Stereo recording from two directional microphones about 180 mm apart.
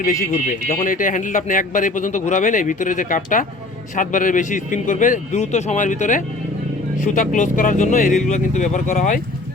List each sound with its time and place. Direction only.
0.0 s a man's voice: 50° left (ahead or behind)